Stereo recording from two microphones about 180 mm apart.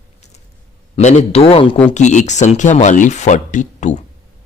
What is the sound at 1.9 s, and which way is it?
Speech, 40° left (ahead or behind).